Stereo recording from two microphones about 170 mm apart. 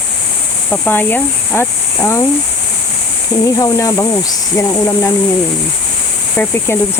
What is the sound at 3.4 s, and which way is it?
Speech, 20° left (ahead or behind).